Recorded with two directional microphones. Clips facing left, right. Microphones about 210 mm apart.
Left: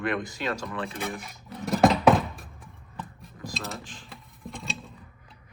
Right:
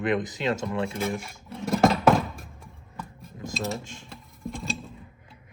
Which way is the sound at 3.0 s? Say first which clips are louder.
Even; centre (ahead or behind).